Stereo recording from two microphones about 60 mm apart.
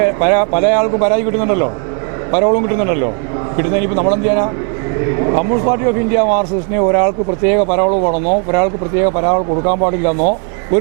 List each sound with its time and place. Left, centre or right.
0.0 s speech: right